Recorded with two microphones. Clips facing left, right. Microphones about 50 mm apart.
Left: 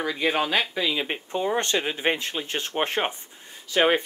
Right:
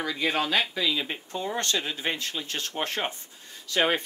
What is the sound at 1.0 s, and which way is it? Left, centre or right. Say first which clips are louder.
Speech: left 5 dB; left.